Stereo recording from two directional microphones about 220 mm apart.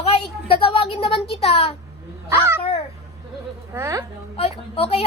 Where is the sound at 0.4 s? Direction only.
25° left (ahead or behind).